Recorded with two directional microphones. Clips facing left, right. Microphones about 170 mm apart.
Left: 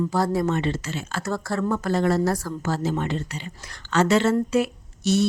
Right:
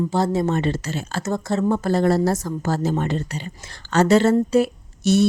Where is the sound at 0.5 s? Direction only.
40° right (ahead or behind).